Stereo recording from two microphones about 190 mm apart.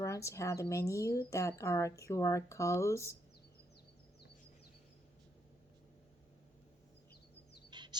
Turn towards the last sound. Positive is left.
turn(degrees=-25)  # may be behind; listen again after turning